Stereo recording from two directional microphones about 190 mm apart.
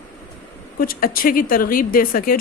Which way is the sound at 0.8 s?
50° left (ahead or behind).